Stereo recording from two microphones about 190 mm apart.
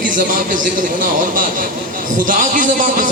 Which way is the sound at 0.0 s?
45° right (ahead or behind).